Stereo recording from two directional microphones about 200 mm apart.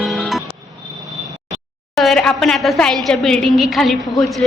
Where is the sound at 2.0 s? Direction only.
Centre (ahead or behind).